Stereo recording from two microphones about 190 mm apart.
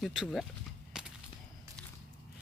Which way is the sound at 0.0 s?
Centre (ahead or behind).